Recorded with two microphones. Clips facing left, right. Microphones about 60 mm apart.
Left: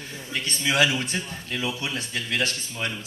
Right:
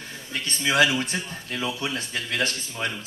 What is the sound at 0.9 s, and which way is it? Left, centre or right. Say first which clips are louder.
Speech: right 1 dB; right.